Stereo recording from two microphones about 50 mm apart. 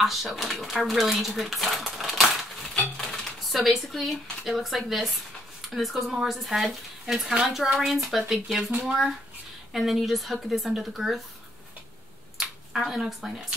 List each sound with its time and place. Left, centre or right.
0.0 s a child's voice: centre
12.7 s speech: centre